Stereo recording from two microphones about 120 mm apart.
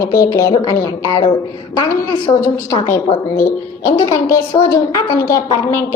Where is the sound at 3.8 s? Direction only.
45° left (ahead or behind).